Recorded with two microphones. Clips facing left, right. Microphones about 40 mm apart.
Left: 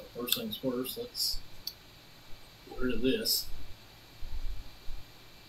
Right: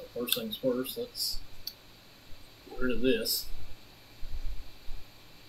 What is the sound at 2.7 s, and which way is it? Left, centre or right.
Speech, centre.